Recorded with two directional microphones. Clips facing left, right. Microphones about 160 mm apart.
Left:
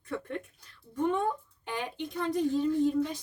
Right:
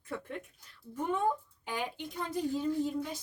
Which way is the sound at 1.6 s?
10° right (ahead or behind).